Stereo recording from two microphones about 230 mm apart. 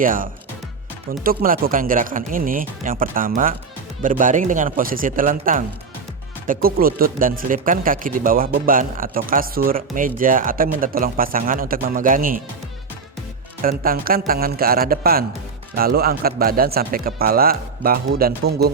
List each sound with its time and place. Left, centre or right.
0.0 s speech: right
13.6 s speech: right